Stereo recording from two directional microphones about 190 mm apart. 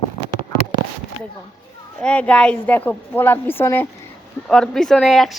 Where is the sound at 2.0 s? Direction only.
5° left (ahead or behind).